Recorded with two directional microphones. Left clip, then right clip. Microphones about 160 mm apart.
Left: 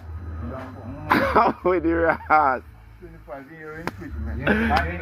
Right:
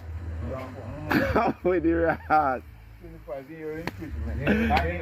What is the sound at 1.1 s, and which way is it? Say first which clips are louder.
A man's voice: left 6 dB; 50° right (ahead or behind).